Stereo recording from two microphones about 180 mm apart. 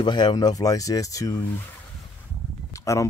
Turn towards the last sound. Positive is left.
turn(degrees=15)  # may be behind; listen again after turning